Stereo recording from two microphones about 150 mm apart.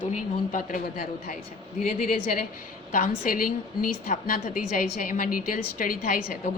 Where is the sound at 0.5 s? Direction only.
65° left (ahead or behind).